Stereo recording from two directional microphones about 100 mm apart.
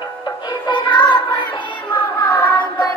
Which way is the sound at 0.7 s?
50° left (ahead or behind).